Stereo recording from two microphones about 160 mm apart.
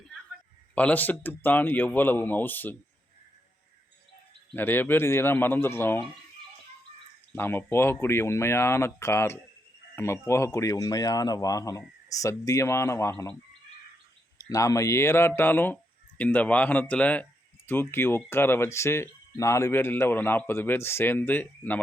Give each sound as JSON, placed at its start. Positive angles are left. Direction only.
{"t": 0.8, "sound": "speech", "side_deg": 10}
{"t": 4.5, "sound": "speech", "side_deg": 10}
{"t": 7.3, "sound": "speech", "side_deg": 15}
{"t": 14.3, "sound": "speech", "side_deg": 20}